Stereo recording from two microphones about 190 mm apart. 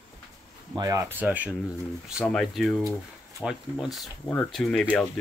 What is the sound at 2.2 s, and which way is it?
Speech, centre (ahead or behind).